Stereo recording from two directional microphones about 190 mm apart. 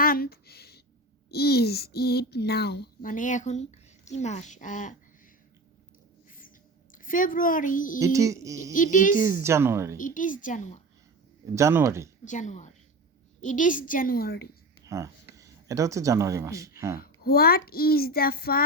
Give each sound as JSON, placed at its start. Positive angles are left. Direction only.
{"t": 0.0, "sound": "a sound", "side_deg": 50}
{"t": 1.3, "sound": "a child's voice", "side_deg": 55}
{"t": 6.9, "sound": "a child's voice", "side_deg": 45}
{"t": 7.9, "sound": "speech", "side_deg": -15}
{"t": 8.7, "sound": "a child's voice", "side_deg": 45}
{"t": 9.2, "sound": "speech", "side_deg": -15}
{"t": 10.0, "sound": "a child's voice", "side_deg": 45}
{"t": 11.5, "sound": "speech", "side_deg": -15}
{"t": 12.2, "sound": "a child's voice", "side_deg": 40}
{"t": 14.8, "sound": "speech", "side_deg": -15}
{"t": 17.0, "sound": "a child's voice", "side_deg": 55}